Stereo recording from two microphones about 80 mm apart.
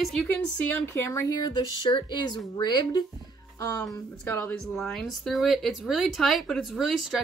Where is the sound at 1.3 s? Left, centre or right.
Left.